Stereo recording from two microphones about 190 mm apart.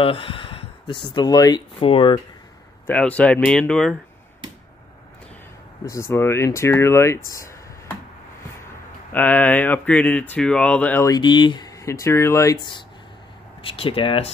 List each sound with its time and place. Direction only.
0.0 s speech: 30° left (ahead or behind)
2.9 s speech: 5° left (ahead or behind)
5.9 s speech: 15° left (ahead or behind)
7.2 s a sound: 15° left (ahead or behind)
9.1 s speech: 10° left (ahead or behind); by 14.3 s 30° left (ahead or behind)